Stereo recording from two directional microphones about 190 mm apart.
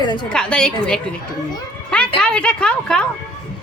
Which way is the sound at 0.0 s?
25° left (ahead or behind).